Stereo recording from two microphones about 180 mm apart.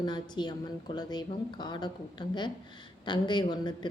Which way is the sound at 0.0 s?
25° left (ahead or behind).